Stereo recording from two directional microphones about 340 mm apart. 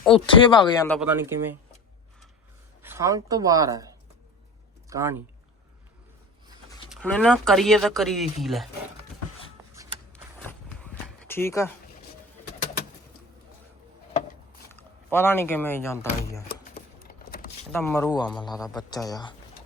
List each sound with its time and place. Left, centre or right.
0.1 s speech: centre
0.9 s speech: centre
2.8 s speech: centre
4.9 s speech: centre
6.9 s speech: centre
10.8 s a sound: centre
14.7 s speech: centre
16.7 s a sound: left
17.7 s speech: centre